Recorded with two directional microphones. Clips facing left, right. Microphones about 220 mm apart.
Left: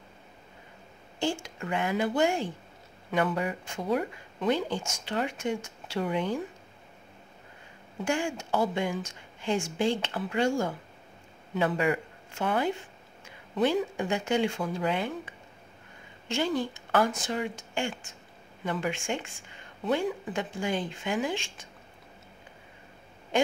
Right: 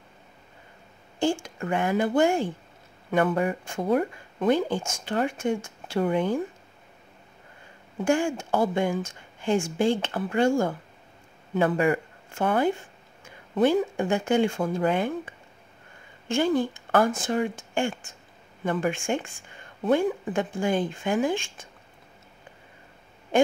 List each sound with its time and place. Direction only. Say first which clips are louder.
1.2 s speech: right 5 dB; 50° right (ahead or behind)
8.0 s speech: right 6 dB; 50° right (ahead or behind)